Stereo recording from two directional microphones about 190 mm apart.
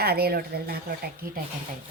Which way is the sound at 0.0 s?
55° right (ahead or behind).